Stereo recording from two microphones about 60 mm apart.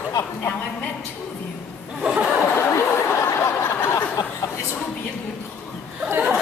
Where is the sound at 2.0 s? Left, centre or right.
Centre.